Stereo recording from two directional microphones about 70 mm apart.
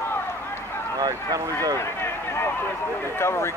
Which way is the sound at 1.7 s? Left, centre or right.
Left.